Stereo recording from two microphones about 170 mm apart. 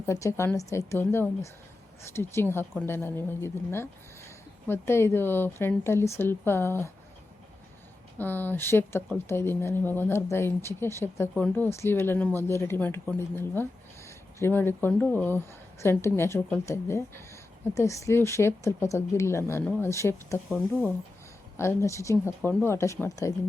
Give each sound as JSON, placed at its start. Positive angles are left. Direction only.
{"t": 0.0, "sound": "speech", "side_deg": 15}
{"t": 8.2, "sound": "speech", "side_deg": 10}